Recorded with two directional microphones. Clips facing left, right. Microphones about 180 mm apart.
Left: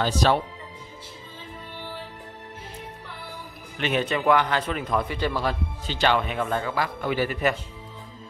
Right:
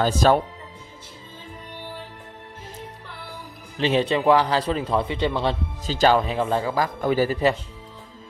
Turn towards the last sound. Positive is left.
turn(degrees=-30)  # may be behind; listen again after turning